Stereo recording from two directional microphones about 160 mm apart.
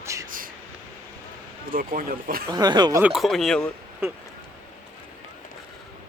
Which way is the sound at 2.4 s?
25° right (ahead or behind).